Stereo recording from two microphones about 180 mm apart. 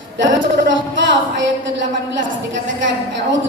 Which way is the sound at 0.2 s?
90° right.